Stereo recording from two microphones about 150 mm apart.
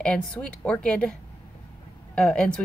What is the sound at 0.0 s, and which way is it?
A woman's voice, 5° left (ahead or behind).